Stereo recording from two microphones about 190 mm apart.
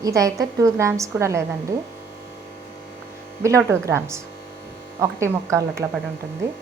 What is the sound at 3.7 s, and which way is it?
A woman's voice, 15° right (ahead or behind).